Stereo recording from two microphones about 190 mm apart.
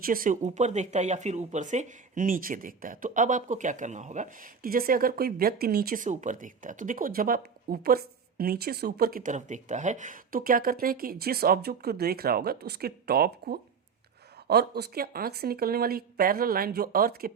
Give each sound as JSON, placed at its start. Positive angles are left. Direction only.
{"t": 0.0, "sound": "speech", "side_deg": -50}